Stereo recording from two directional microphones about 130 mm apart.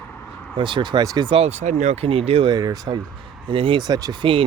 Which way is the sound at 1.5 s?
65° right (ahead or behind).